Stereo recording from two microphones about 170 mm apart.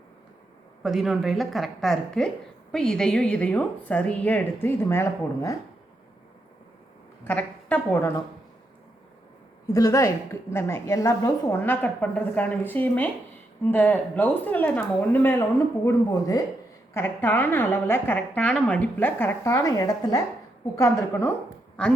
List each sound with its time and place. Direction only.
0.8 s a woman's voice: centre (ahead or behind); by 5.5 s 15° left (ahead or behind)
7.3 s a woman's voice: 10° left (ahead or behind)
9.7 s a woman's voice: 20° left (ahead or behind)